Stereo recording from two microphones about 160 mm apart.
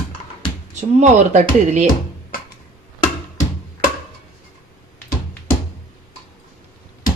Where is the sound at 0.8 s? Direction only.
45° right (ahead or behind).